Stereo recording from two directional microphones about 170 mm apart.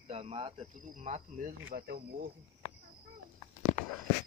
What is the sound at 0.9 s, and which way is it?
Speech, 45° right (ahead or behind).